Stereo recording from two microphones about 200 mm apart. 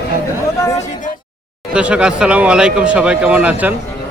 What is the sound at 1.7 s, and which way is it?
Speech, 5° right (ahead or behind).